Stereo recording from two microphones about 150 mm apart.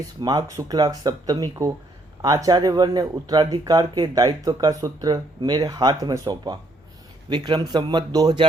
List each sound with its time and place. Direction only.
0.2 s speech: 25° right (ahead or behind)